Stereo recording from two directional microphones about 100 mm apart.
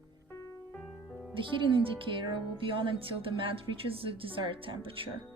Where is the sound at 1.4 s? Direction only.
60° right (ahead or behind).